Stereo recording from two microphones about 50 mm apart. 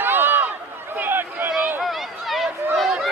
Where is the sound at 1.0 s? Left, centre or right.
Right.